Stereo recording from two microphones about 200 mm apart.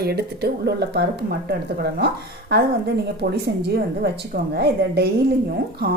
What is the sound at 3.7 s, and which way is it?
A woman's voice, 50° right (ahead or behind).